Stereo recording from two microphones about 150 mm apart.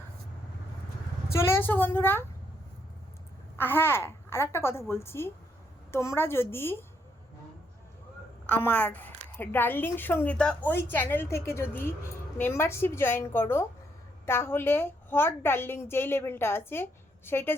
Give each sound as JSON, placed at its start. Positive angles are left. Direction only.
{"t": 1.3, "sound": "a woman's voice", "side_deg": 15}
{"t": 3.6, "sound": "a woman's voice", "side_deg": 15}
{"t": 8.4, "sound": "a woman's voice", "side_deg": 15}